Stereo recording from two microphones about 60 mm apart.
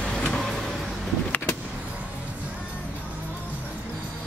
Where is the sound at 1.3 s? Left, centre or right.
Left.